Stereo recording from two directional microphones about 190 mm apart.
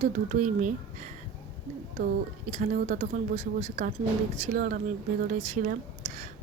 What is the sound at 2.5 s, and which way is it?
Speech, 40° right (ahead or behind).